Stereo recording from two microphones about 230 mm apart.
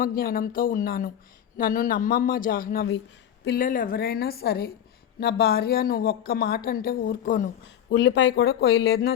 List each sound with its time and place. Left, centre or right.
0.0 s a woman's voice: left
7.9 s speech: left